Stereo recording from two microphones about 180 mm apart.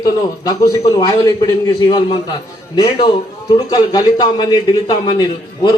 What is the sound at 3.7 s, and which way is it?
A man's voice, 20° left (ahead or behind).